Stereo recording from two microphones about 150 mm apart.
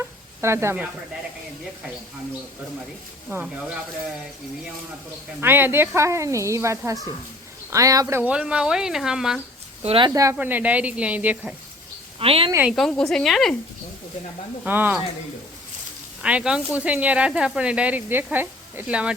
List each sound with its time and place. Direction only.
0.4 s speech: 15° right (ahead or behind)
3.2 s speech: 5° right (ahead or behind)
5.4 s speech: 15° right (ahead or behind)
8.2 s speech: 5° right (ahead or behind)
9.8 s speech: 40° right (ahead or behind)
10.3 s speech: 10° right (ahead or behind)
12.2 s speech: 40° right (ahead or behind)
12.6 s speech: centre (ahead or behind)
14.6 s speech: 10° right (ahead or behind)
16.2 s speech: 5° right (ahead or behind)